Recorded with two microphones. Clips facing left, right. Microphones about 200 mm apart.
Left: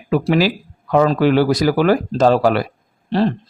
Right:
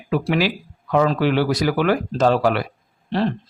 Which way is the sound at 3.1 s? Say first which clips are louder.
Left 4 dB; 35° left (ahead or behind).